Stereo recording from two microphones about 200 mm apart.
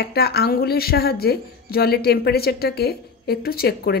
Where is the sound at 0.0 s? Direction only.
50° left (ahead or behind).